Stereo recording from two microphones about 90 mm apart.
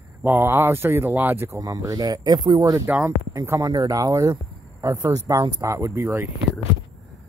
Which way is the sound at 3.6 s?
45° right (ahead or behind).